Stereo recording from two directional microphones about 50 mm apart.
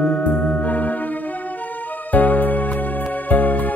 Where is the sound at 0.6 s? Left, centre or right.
Left.